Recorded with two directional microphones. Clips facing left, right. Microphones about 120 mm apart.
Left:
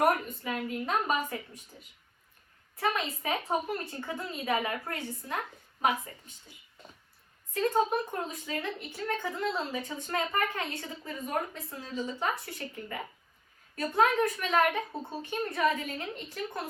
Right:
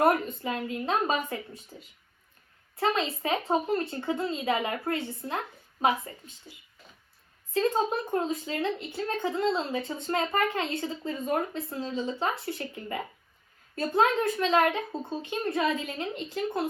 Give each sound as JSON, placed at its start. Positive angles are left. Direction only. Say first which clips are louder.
{"t": 0.0, "sound": "a woman's voice", "louder": "right 3 dB", "side_deg": -30}
{"t": 2.7, "sound": "a woman's voice", "louder": "right 4 dB", "side_deg": -25}
{"t": 7.5, "sound": "a woman's voice", "louder": "right 1 dB", "side_deg": -25}